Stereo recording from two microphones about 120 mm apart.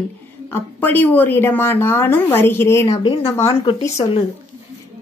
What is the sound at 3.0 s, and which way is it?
Speech, 40° left (ahead or behind).